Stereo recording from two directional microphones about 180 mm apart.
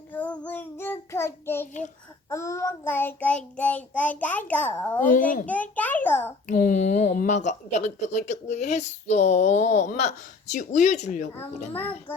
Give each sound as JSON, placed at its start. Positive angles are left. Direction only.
{"t": 0.1, "sound": "child singing", "side_deg": 10}
{"t": 4.9, "sound": "a child's voice", "side_deg": 50}
{"t": 5.5, "sound": "child singing", "side_deg": 10}
{"t": 6.5, "sound": "speech", "side_deg": 50}
{"t": 11.7, "sound": "child singing", "side_deg": 10}